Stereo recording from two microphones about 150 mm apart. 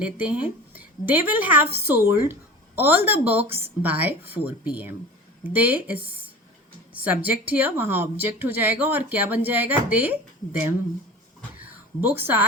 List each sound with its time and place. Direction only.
0.0 s a woman's voice: 10° right (ahead or behind)
7.0 s speech: 10° right (ahead or behind)
12.2 s speech: 15° right (ahead or behind)